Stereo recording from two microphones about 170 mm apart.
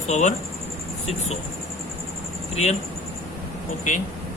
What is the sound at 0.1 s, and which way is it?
Speech, 45° left (ahead or behind).